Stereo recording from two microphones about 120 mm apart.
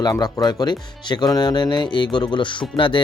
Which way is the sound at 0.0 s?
35° left (ahead or behind).